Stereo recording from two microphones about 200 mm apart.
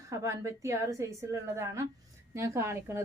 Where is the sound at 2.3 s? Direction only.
15° right (ahead or behind).